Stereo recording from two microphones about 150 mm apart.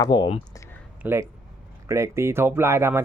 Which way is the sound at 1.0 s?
15° right (ahead or behind).